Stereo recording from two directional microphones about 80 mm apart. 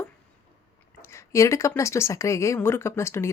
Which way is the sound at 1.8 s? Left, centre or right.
Left.